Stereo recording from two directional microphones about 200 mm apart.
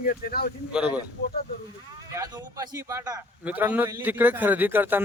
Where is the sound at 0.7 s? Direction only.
5° right (ahead or behind).